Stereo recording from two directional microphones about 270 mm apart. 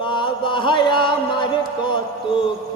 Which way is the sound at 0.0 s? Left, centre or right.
Centre.